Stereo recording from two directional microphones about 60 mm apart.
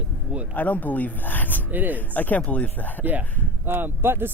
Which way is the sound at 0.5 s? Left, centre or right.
Left.